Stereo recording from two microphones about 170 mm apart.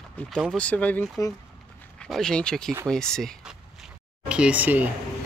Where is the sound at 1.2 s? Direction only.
20° left (ahead or behind).